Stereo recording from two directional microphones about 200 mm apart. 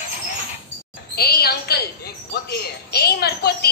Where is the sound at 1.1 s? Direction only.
50° left (ahead or behind).